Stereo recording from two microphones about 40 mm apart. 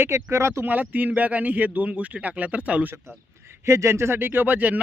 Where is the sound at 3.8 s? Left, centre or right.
Right.